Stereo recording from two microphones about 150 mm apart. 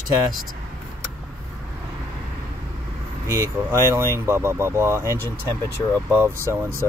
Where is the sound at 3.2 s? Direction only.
15° right (ahead or behind).